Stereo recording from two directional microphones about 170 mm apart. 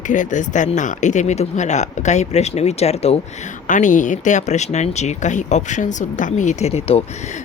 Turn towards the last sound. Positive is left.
turn(degrees=35)  # may be behind; listen again after turning